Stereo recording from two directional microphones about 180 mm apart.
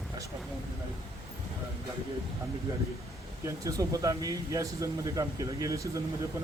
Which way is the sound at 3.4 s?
20° right (ahead or behind).